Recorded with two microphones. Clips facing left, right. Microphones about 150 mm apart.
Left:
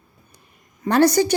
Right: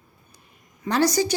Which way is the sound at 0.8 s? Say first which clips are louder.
Left 5 dB; 55° left (ahead or behind).